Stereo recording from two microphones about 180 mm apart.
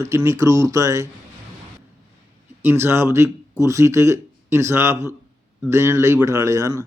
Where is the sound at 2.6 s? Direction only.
10° right (ahead or behind).